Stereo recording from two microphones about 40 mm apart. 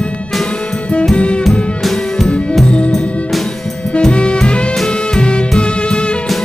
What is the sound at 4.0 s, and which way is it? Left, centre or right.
Music, left.